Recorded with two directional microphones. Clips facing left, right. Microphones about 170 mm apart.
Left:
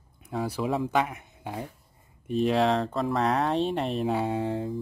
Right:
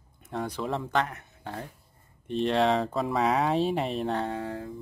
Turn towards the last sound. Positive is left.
turn(degrees=25)  # may be behind; listen again after turning